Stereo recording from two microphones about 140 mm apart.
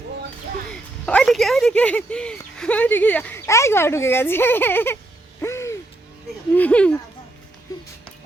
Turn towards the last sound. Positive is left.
turn(degrees=10)  # may be behind; listen again after turning